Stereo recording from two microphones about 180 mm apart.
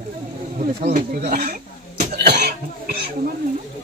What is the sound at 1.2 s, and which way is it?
Cough, 55° right (ahead or behind).